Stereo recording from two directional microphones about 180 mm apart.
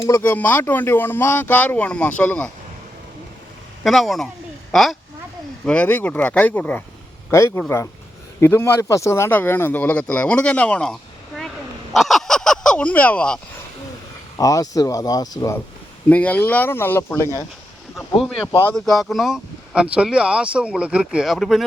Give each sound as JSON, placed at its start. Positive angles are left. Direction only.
{"t": 0.0, "sound": "speech", "side_deg": 15}
{"t": 3.8, "sound": "speech", "side_deg": 0}
{"t": 11.9, "sound": "honk", "side_deg": 0}
{"t": 14.3, "sound": "speech", "side_deg": 20}
{"t": 17.9, "sound": "speech", "side_deg": 0}